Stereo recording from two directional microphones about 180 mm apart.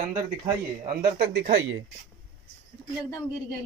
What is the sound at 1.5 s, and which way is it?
Speech, 90° right.